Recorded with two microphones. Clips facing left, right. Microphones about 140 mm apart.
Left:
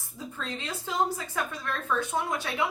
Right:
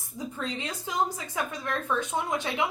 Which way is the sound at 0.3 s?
15° right (ahead or behind).